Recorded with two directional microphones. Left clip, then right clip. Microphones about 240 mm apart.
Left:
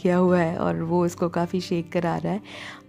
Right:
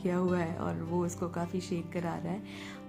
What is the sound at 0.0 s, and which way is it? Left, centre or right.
A woman's voice, left.